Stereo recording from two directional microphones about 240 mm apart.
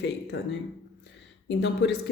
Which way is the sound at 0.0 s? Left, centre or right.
Left.